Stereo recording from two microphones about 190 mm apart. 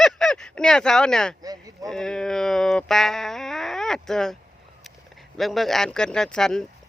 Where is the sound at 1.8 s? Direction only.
5° left (ahead or behind).